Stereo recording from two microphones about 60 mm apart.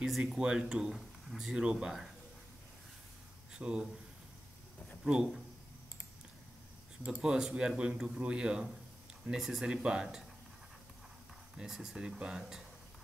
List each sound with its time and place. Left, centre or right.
0.0 s speech: centre
3.5 s speech: centre
5.0 s speech: centre
7.1 s speech: centre
11.5 s speech: centre